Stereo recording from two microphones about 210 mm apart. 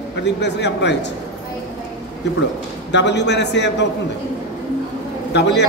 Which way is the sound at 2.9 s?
55° left (ahead or behind).